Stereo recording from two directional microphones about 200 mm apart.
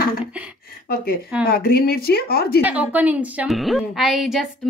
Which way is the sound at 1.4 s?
50° left (ahead or behind).